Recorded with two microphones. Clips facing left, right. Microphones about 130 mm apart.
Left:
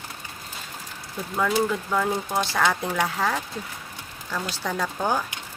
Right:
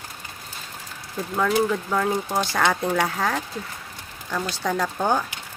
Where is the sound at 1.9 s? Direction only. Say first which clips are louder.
Right 1 dB; centre (ahead or behind).